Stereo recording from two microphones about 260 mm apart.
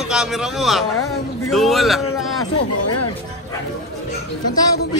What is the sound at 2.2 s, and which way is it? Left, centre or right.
Speech, left.